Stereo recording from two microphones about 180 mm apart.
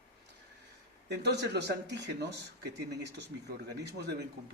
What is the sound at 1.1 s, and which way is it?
Speech, 70° right (ahead or behind).